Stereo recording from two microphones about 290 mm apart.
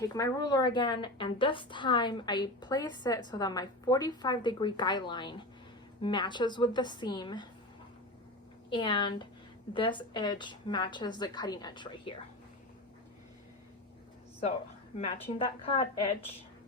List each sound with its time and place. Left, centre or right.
0.0 s a woman's voice: centre
8.7 s a woman's voice: centre
14.9 s a woman's voice: left